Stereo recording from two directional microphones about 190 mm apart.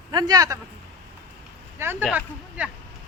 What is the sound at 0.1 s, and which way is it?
Speech, 20° right (ahead or behind).